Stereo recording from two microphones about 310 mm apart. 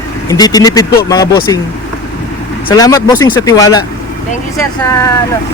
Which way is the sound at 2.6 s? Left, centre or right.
Centre.